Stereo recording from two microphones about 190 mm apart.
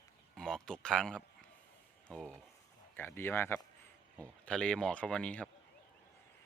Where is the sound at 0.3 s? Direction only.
5° left (ahead or behind).